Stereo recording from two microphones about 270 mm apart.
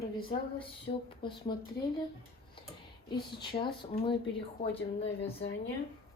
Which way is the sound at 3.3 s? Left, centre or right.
Centre.